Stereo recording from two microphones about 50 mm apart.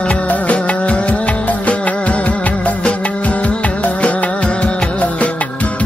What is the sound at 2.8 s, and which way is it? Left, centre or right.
Music, left.